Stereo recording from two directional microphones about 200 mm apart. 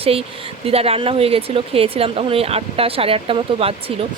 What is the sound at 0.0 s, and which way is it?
Speech, 30° right (ahead or behind).